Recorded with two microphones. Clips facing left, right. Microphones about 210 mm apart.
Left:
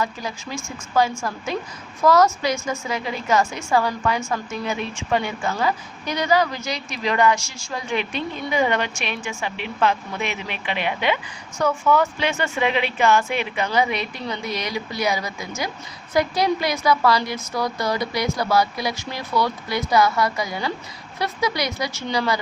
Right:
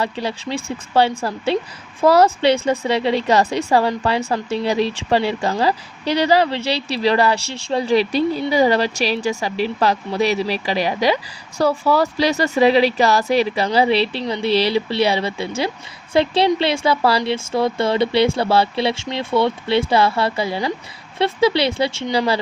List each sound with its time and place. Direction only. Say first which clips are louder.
0.0 s speech: right 4 dB; 30° right (ahead or behind)